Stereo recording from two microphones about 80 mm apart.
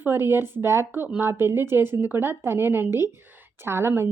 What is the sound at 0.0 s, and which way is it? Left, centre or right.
Speech, right.